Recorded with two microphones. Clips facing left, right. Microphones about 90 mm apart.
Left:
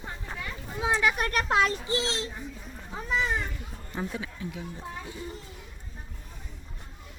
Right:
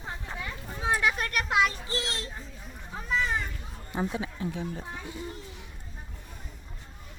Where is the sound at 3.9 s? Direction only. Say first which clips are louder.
Right 3 dB; 25° right (ahead or behind).